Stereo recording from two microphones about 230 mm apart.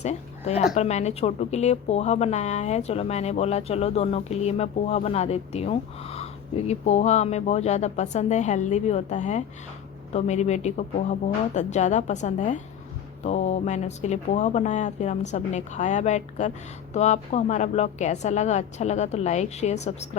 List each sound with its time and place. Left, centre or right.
0.0 s speech: left